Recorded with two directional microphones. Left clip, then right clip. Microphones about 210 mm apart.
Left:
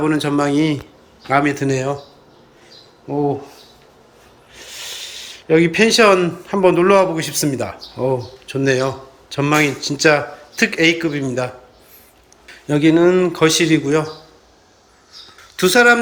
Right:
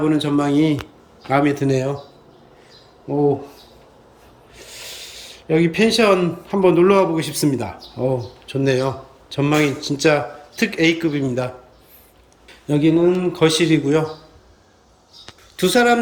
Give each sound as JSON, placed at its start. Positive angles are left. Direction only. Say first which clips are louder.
{"t": 0.0, "sound": "a man's voice", "louder": "left 1 dB", "side_deg": 0}
{"t": 3.1, "sound": "speech", "louder": "right 1 dB", "side_deg": -5}
{"t": 4.5, "sound": "a man's voice", "louder": "left 5 dB", "side_deg": -5}
{"t": 15.5, "sound": "speech", "louder": "left 4 dB", "side_deg": -5}